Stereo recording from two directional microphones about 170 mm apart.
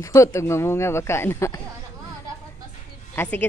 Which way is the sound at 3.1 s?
10° left (ahead or behind).